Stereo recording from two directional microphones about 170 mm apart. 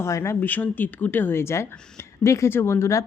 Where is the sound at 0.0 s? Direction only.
15° left (ahead or behind).